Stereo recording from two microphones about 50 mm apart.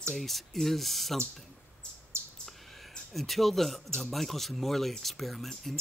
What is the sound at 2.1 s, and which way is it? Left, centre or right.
Bird, right.